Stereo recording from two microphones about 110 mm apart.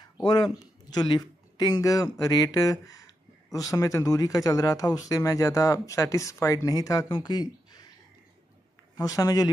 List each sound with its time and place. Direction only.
0.2 s speech: 40° left (ahead or behind)
1.8 s speech: 30° left (ahead or behind)
8.9 s speech: 35° left (ahead or behind)